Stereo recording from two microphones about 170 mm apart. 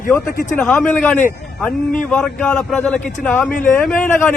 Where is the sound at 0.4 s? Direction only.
15° left (ahead or behind).